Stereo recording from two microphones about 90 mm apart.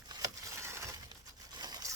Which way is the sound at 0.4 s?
30° right (ahead or behind).